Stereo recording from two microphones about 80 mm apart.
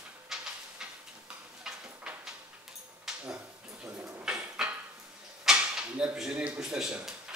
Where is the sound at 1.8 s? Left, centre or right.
Centre.